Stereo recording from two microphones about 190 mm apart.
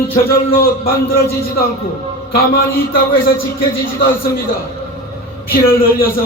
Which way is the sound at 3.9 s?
50° left (ahead or behind).